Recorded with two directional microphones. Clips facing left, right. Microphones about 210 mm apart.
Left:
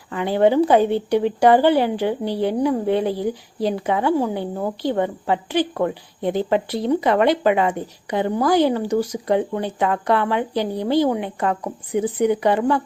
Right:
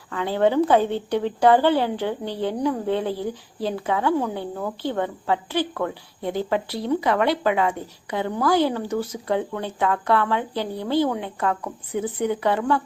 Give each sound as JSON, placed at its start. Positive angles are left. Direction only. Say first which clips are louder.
{"t": 0.1, "sound": "speech", "louder": "left 4 dB", "side_deg": 15}